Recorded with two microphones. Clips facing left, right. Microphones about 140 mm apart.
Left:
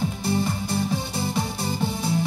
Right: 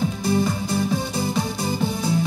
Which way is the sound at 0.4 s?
45° right (ahead or behind).